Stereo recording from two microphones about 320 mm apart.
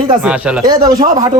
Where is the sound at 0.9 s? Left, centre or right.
Centre.